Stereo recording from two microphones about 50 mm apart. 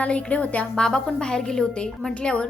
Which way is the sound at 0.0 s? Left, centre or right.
Left.